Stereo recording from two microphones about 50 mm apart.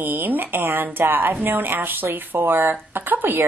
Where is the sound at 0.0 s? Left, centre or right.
Right.